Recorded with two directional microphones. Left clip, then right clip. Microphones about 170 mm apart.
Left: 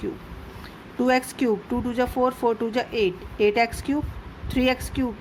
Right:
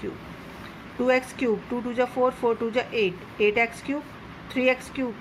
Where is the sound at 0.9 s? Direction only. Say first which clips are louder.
Left 1 dB; 45° left (ahead or behind).